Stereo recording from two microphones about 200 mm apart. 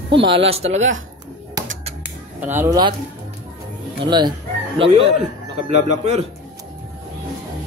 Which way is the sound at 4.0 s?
20° right (ahead or behind).